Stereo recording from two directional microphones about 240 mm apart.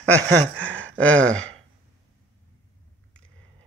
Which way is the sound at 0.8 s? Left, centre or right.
Centre.